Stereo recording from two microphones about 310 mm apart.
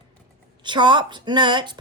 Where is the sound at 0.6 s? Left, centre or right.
Centre.